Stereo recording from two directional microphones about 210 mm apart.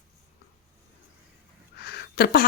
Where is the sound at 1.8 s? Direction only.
50° left (ahead or behind).